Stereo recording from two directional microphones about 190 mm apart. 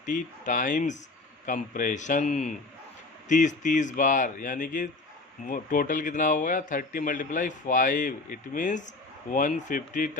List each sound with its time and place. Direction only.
0.0 s a man's voice: 40° left (ahead or behind)